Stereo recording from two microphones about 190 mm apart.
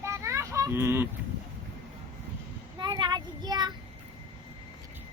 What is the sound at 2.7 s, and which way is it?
Child singing, 25° right (ahead or behind).